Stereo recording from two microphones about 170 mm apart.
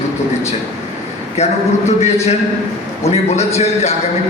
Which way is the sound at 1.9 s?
40° left (ahead or behind).